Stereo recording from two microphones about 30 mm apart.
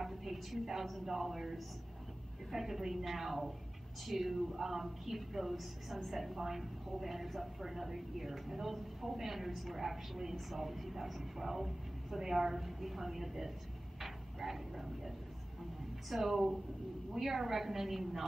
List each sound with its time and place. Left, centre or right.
0.0 s a sound: centre
1.0 s speech: centre
16.1 s speech: centre